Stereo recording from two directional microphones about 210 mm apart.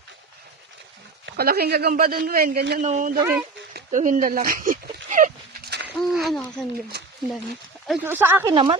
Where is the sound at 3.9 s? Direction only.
35° right (ahead or behind).